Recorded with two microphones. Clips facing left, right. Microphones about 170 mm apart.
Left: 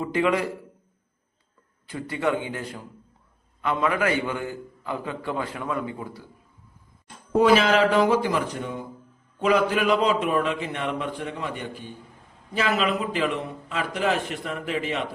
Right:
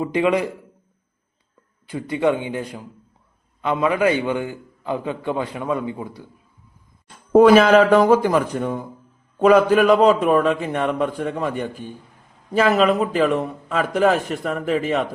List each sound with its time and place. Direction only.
0.0 s a man's voice: 20° right (ahead or behind)
1.9 s a man's voice: 15° right (ahead or behind)
7.3 s a man's voice: 50° right (ahead or behind)